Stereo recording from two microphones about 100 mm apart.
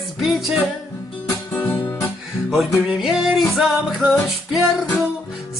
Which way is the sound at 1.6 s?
25° left (ahead or behind).